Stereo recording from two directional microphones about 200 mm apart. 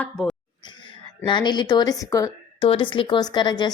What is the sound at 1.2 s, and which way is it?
A woman's voice, 25° left (ahead or behind).